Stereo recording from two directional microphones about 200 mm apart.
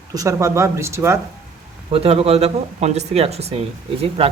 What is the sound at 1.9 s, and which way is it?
A man's voice, 30° right (ahead or behind).